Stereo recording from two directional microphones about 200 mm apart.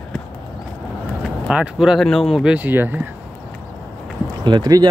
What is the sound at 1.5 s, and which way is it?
Speech, 5° right (ahead or behind).